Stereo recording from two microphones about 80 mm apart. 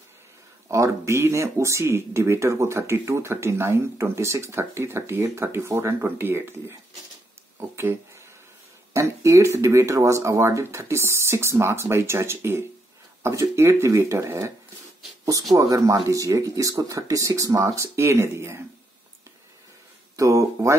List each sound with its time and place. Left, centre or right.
0.7 s speech: right
7.7 s a sound: right
8.9 s speech: right
15.5 s speech: right
20.2 s speech: right